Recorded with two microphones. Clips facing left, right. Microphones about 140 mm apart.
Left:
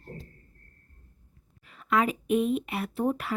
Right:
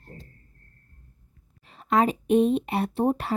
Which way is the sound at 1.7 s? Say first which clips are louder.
Right 4 dB; 30° right (ahead or behind).